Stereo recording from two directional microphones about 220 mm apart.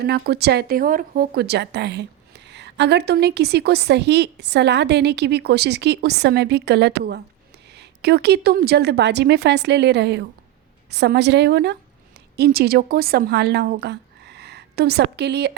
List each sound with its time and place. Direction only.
0.0 s a woman's voice: 45° right (ahead or behind)